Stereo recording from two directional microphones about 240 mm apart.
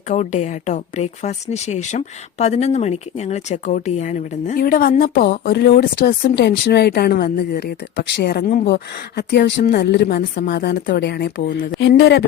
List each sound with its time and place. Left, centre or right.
0.1 s a woman's voice: left